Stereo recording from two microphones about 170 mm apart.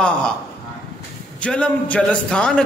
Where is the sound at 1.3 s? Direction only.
5° left (ahead or behind).